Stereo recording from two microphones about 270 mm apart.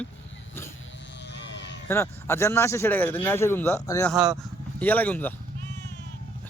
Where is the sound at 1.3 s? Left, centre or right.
Left.